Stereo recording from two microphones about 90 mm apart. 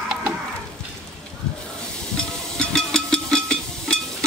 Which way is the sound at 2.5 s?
5° left (ahead or behind).